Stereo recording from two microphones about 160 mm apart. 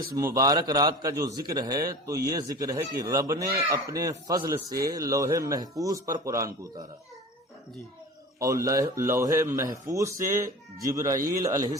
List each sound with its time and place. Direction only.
0.3 s speech: 20° right (ahead or behind)
8.4 s speech: 20° right (ahead or behind)